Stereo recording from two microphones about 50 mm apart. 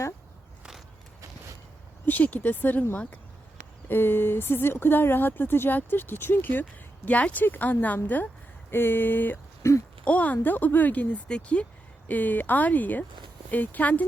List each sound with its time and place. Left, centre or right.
2.0 s speech: left
3.8 s speech: left
7.4 s speech: left
9.6 s speech: left
10.0 s speech: left
10.3 s speech: left
11.3 s speech: left
12.0 s speech: left